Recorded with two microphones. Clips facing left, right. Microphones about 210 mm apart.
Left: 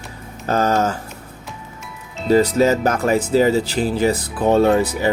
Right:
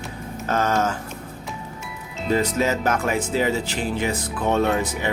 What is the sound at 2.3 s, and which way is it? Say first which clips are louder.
Speech: left 7 dB; 35° left (ahead or behind).